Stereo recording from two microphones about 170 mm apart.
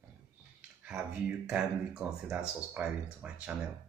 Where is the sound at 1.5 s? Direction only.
5° right (ahead or behind).